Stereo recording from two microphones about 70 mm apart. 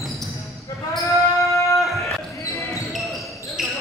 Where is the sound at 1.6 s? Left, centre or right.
Centre.